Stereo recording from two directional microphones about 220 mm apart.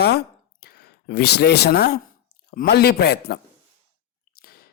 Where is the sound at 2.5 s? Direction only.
45° left (ahead or behind).